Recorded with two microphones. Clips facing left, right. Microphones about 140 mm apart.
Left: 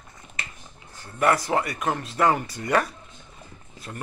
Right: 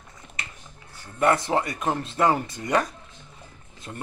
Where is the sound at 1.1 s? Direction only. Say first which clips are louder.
Even; 25° right (ahead or behind).